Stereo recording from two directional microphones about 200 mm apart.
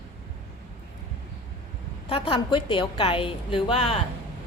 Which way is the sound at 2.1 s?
25° left (ahead or behind).